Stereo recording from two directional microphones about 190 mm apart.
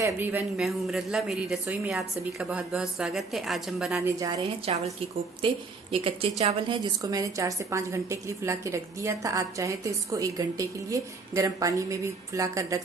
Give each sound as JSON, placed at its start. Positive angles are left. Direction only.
{"t": 0.0, "sound": "a woman's voice", "side_deg": -10}
{"t": 3.9, "sound": "a woman's voice", "side_deg": -15}
{"t": 4.7, "sound": "a woman's voice", "side_deg": -30}
{"t": 5.9, "sound": "a woman's voice", "side_deg": -30}